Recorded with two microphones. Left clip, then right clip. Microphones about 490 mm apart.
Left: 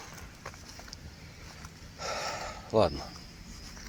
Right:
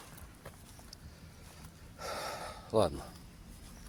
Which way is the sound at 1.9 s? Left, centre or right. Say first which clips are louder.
Left 5 dB; right.